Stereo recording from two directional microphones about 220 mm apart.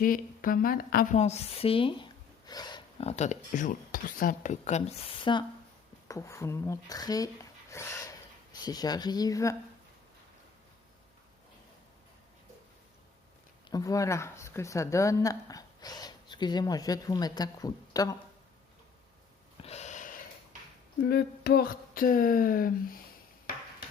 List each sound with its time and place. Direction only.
0.0 s a woman's voice: 40° left (ahead or behind); by 7.3 s 15° left (ahead or behind)
7.7 s a sound: 10° left (ahead or behind)
8.6 s a woman's voice: 15° left (ahead or behind)
13.7 s a woman's voice: 15° left (ahead or behind)
19.6 s snort: 30° left (ahead or behind)
21.1 s speech: 45° left (ahead or behind)